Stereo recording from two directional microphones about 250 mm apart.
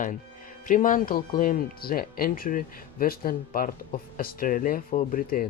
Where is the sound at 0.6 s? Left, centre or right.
Left.